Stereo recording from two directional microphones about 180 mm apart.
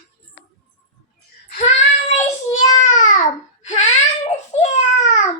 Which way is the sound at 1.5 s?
45° left (ahead or behind).